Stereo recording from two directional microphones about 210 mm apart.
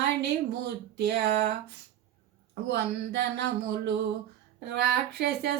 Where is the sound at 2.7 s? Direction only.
55° right (ahead or behind).